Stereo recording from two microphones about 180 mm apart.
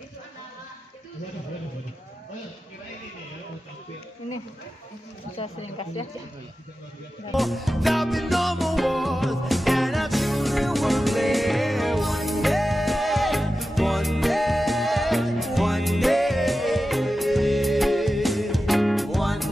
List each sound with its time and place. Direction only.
5.4 s speech: 30° left (ahead or behind)
7.3 s music: centre (ahead or behind)